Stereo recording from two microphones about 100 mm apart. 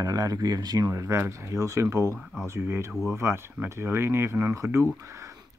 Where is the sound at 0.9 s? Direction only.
30° right (ahead or behind).